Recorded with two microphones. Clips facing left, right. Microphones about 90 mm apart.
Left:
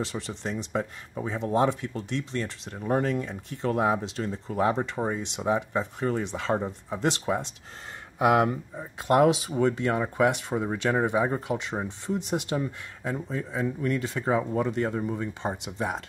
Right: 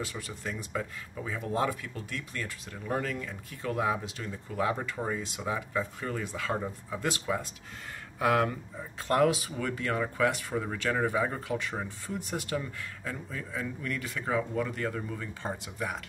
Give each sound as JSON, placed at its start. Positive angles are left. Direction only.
{"t": 0.0, "sound": "speech", "side_deg": 30}